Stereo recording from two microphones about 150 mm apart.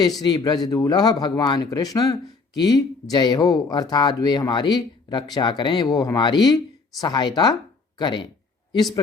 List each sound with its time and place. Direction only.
0.2 s speech: 30° left (ahead or behind)